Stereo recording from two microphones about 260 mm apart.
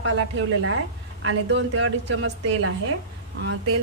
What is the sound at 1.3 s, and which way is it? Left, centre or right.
A woman's voice, right.